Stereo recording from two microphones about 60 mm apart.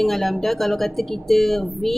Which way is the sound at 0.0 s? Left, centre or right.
Centre.